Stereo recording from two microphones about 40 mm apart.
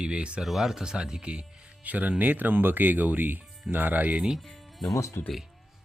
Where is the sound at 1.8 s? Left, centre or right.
Right.